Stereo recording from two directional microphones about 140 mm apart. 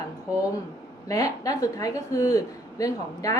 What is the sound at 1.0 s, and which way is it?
Speech, 25° left (ahead or behind).